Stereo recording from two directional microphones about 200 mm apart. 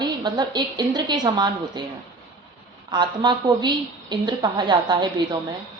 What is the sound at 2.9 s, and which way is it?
A woman's voice, 20° right (ahead or behind).